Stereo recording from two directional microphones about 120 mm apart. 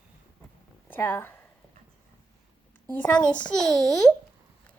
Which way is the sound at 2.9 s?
15° left (ahead or behind).